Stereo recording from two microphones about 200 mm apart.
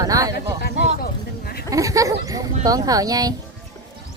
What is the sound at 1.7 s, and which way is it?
Speech, 15° right (ahead or behind).